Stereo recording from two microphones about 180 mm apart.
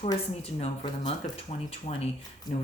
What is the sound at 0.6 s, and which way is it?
Speech, 35° left (ahead or behind).